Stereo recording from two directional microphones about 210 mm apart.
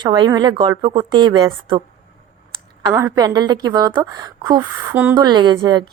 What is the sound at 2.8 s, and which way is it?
A woman's voice, 15° right (ahead or behind).